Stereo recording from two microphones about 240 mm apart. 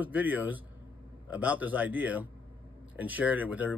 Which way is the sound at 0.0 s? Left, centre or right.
Centre.